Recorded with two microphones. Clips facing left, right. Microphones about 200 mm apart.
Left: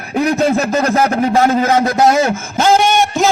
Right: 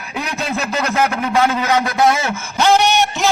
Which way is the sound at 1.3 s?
45° left (ahead or behind).